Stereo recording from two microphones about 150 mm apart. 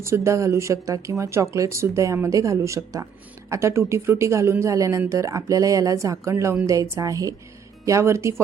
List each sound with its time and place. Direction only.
0.0 s speech: 20° right (ahead or behind)